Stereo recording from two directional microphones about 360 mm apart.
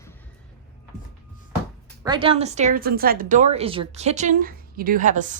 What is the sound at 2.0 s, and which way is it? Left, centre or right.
A woman's voice, centre.